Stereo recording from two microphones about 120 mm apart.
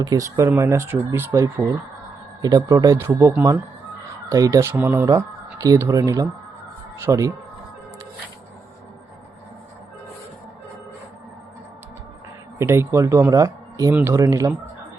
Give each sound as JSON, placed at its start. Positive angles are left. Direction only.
{"t": 0.0, "sound": "speech", "side_deg": -30}
{"t": 4.7, "sound": "speech", "side_deg": -15}
{"t": 5.0, "sound": "speech", "side_deg": -30}
{"t": 12.5, "sound": "speech", "side_deg": -20}